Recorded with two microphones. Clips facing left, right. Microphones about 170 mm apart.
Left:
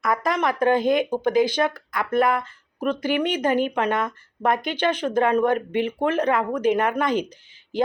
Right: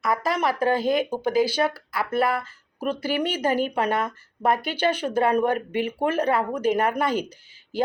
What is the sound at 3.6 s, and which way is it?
Speech, 35° right (ahead or behind).